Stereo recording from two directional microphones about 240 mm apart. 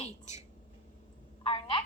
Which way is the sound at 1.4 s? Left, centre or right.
Left.